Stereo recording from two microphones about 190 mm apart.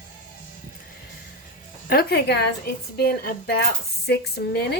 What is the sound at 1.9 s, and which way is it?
A woman's voice, 55° left (ahead or behind).